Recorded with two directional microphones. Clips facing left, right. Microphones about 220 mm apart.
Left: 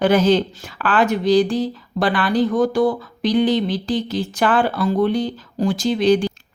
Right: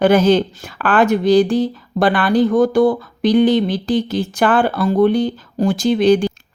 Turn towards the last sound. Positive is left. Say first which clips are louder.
# right 3 dB
turn(degrees=-55)  # may be behind; listen again after turning